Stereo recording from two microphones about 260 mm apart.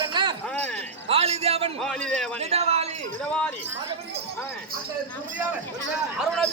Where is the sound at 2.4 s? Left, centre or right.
Right.